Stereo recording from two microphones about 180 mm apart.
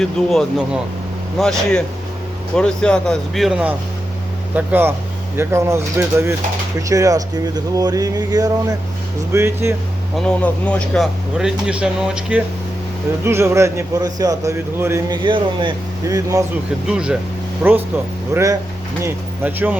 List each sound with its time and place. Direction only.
0.0 s a man's voice: centre (ahead or behind); by 9.7 s 15° right (ahead or behind)
10.2 s a man's voice: 5° left (ahead or behind); by 15.2 s 15° right (ahead or behind)
15.2 s speech: 25° right (ahead or behind)
16.9 s a man's voice: 5° right (ahead or behind)